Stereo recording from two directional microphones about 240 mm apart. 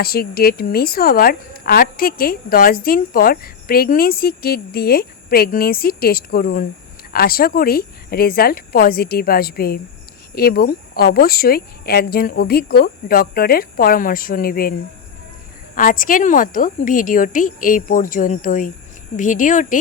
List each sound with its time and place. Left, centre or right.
0.0 s a woman's voice: left